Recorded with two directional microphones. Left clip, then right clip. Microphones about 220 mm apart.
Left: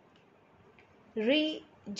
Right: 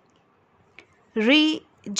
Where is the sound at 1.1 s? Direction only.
35° right (ahead or behind).